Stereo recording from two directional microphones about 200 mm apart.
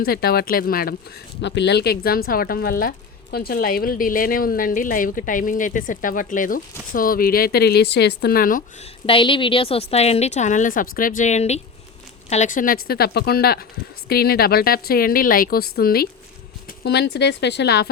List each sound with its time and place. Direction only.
0.0 s a woman's voice: 50° left (ahead or behind)
1.4 s a woman's voice: 60° left (ahead or behind); by 8.9 s 45° left (ahead or behind)
9.0 s a woman's voice: 25° left (ahead or behind); by 17.9 s 55° left (ahead or behind)